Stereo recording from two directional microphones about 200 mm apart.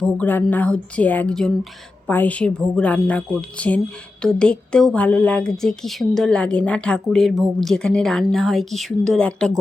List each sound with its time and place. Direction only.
0.0 s a woman's voice: 10° left (ahead or behind)